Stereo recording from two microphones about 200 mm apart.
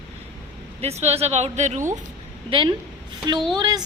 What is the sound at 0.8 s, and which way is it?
Speech, 30° right (ahead or behind).